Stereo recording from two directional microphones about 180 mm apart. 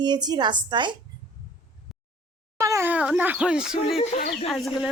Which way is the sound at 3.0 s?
5° right (ahead or behind).